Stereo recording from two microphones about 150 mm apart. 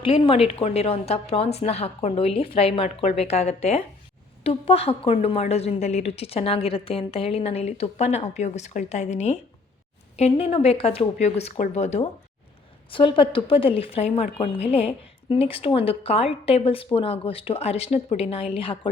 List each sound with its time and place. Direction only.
0.0 s a woman's voice: 35° left (ahead or behind)
12.9 s a woman's voice: 35° left (ahead or behind)